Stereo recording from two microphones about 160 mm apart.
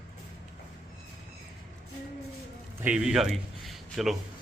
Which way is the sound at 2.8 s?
5° right (ahead or behind).